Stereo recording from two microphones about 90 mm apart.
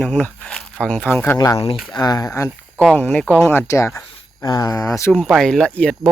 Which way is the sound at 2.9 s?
15° left (ahead or behind).